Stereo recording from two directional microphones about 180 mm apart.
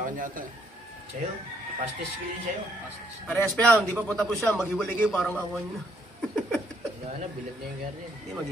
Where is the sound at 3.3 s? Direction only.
10° left (ahead or behind).